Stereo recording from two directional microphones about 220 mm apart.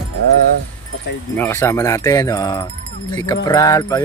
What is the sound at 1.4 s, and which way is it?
Speech, 10° left (ahead or behind).